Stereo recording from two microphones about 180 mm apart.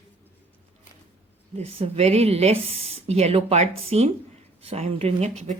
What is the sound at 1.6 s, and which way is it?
Speech, 35° right (ahead or behind).